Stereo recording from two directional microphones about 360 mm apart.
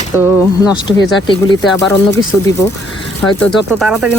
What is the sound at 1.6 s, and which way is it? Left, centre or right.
Speech, centre.